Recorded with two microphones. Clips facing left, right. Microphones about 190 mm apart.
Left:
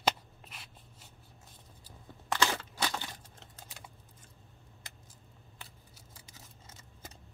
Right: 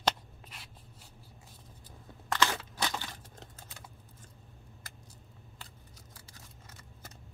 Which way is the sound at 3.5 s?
10° left (ahead or behind).